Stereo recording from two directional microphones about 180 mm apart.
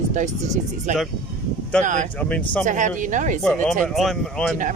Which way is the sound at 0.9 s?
45° right (ahead or behind).